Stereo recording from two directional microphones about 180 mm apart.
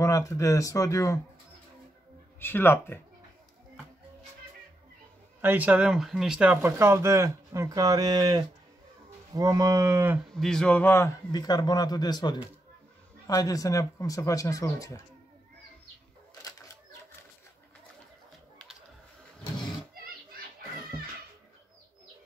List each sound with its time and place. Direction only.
0.0 s speech: 15° left (ahead or behind)
2.4 s speech: 10° left (ahead or behind)
5.4 s speech: 10° right (ahead or behind)
10.3 s a man's voice: 5° left (ahead or behind); by 15.0 s 20° left (ahead or behind)
16.4 s a sound: 20° left (ahead or behind)